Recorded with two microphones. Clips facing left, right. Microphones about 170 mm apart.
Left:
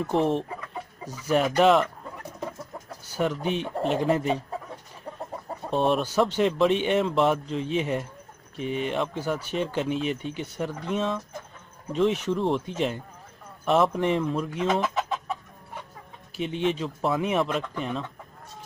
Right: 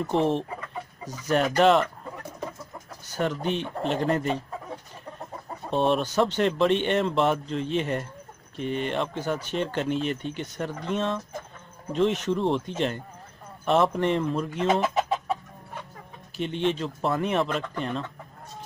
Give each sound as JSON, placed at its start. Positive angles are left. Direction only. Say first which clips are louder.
{"t": 0.0, "sound": "speech", "louder": "even", "side_deg": 0}
{"t": 3.1, "sound": "speech", "louder": "left 1 dB", "side_deg": 5}
{"t": 5.7, "sound": "speech", "louder": "even", "side_deg": 0}
{"t": 16.3, "sound": "speech", "louder": "even", "side_deg": 5}